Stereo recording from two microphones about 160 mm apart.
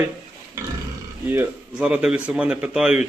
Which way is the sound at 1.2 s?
10° right (ahead or behind).